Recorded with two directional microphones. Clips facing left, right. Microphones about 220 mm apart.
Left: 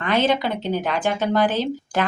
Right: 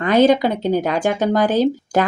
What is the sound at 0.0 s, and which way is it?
Speech, 45° right (ahead or behind).